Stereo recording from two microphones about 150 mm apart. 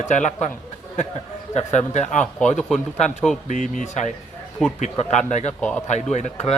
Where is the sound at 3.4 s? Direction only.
55° left (ahead or behind).